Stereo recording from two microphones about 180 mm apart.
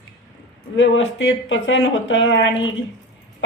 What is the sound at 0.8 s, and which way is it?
Speech, 90° left.